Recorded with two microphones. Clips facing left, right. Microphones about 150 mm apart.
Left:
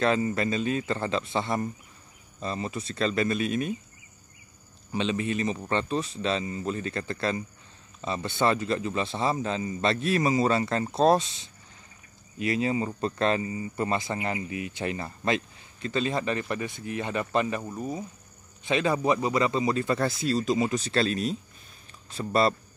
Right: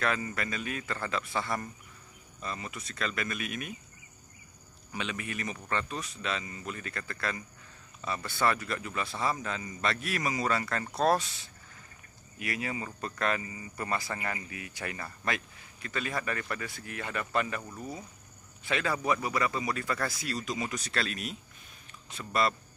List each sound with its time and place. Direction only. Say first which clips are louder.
0.0 s speech: left 7 dB; 25° left (ahead or behind)
4.9 s speech: left 9 dB; 25° left (ahead or behind)